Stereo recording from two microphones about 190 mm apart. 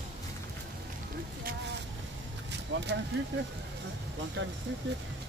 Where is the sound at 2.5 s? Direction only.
65° right (ahead or behind).